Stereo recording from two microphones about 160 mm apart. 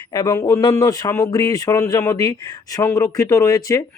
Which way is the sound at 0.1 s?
25° left (ahead or behind).